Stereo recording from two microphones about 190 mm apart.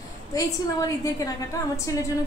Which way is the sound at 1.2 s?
15° left (ahead or behind).